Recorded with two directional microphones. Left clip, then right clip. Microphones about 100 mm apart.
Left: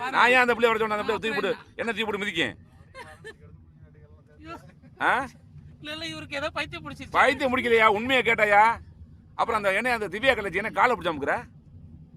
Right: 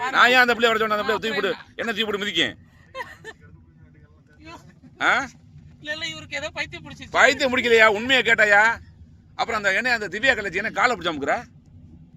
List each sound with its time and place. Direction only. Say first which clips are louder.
0.1 s a man's voice: right 3 dB; 20° left (ahead or behind)
4.9 s speech: right 3 dB; 30° left (ahead or behind)
6.1 s speech: right 1 dB; 45° left (ahead or behind)
7.1 s a man's voice: right 4 dB; 15° left (ahead or behind)